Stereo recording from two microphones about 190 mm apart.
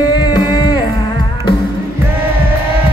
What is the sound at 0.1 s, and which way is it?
Music, 25° left (ahead or behind).